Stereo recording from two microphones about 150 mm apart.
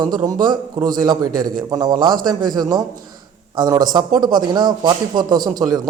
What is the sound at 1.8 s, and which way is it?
A man's voice, 30° right (ahead or behind).